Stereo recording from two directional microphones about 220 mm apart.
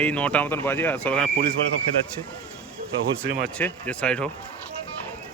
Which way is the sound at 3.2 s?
40° right (ahead or behind).